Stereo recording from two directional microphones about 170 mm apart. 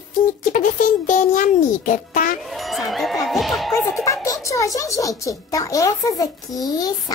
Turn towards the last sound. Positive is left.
turn(degrees=20)  # may be behind; listen again after turning